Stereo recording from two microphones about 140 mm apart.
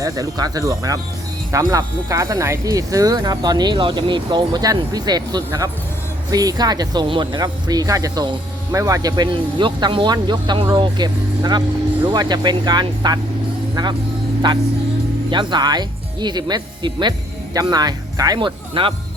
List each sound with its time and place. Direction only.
0.0 s speech: 25° right (ahead or behind)
14.4 s speech: 35° right (ahead or behind)